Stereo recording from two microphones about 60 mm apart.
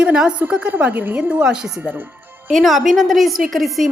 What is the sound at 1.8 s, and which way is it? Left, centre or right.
Speech, right.